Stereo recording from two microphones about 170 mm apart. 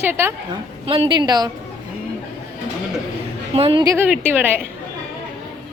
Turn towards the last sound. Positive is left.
turn(degrees=-10)  # may be behind; listen again after turning